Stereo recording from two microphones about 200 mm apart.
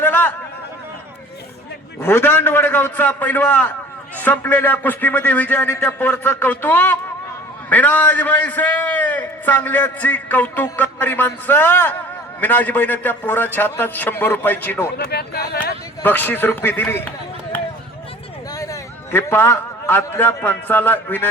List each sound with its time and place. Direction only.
0.0 s a sound: 10° left (ahead or behind)
2.0 s a man's voice: 10° left (ahead or behind)
14.9 s speech: 50° left (ahead or behind)
16.0 s a man's voice: 10° left (ahead or behind)